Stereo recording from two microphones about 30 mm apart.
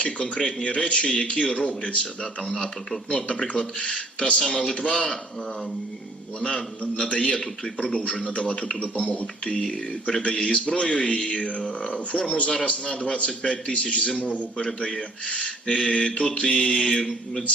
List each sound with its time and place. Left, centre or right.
0.0 s speech: left
2.4 s mantra: left
3.1 s speech: left
6.6 s mantra: left
7.1 s a man's voice: left
14.8 s mantra: left
15.3 s a man's voice: left
15.6 s speech: left
16.3 s mantra: left